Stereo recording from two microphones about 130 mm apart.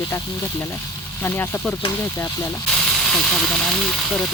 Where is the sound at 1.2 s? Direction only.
15° left (ahead or behind).